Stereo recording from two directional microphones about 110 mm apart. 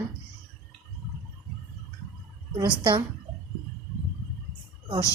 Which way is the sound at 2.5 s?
45° right (ahead or behind).